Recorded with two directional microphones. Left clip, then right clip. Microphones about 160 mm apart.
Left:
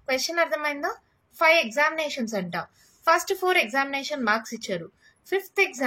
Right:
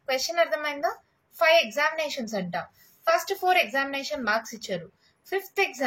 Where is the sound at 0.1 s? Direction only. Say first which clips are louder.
Even; 35° left (ahead or behind).